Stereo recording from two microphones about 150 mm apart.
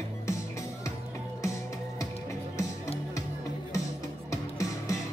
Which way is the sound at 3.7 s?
20° left (ahead or behind).